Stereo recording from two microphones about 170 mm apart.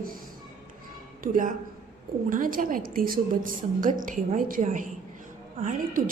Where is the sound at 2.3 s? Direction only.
55° right (ahead or behind).